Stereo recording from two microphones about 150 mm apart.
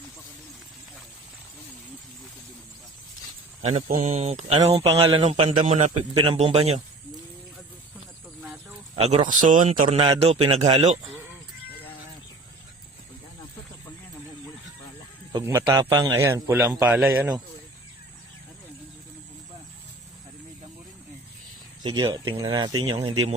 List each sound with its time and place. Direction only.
3.6 s a man's voice: 45° right (ahead or behind)
6.1 s speech: 40° right (ahead or behind)
9.0 s speech: 45° right (ahead or behind)
9.3 s speech: 60° right (ahead or behind)
9.8 s a man's voice: 35° right (ahead or behind)
15.7 s a man's voice: 20° right (ahead or behind)
21.8 s speech: 30° right (ahead or behind)